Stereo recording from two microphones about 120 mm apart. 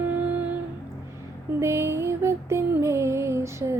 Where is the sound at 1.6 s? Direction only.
20° right (ahead or behind).